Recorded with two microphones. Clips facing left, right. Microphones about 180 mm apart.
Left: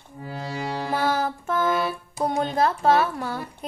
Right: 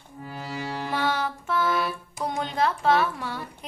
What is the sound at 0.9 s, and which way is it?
Music, 40° left (ahead or behind).